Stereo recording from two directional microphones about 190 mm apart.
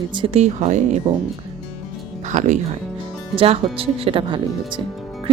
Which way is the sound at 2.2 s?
40° right (ahead or behind).